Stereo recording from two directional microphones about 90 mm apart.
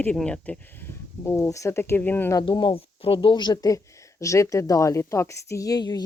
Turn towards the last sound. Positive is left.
turn(degrees=45)  # may be behind; listen again after turning